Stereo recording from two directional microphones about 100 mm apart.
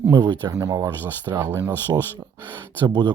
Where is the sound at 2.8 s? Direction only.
50° right (ahead or behind).